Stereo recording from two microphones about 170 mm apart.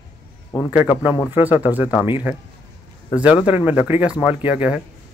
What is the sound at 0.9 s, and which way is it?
Speech, 10° right (ahead or behind).